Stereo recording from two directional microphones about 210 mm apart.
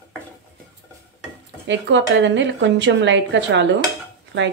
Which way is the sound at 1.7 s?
60° right (ahead or behind).